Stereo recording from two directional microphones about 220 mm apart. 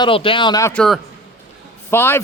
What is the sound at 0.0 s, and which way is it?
A man's voice, 25° left (ahead or behind).